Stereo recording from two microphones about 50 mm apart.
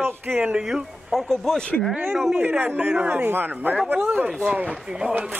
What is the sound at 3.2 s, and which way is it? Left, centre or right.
Speech, right.